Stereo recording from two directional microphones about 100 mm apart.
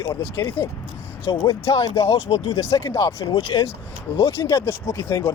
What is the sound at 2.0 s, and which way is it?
Speech, 75° left (ahead or behind).